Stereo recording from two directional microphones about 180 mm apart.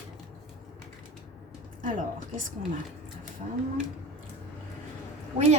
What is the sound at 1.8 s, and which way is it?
Speech, 50° right (ahead or behind).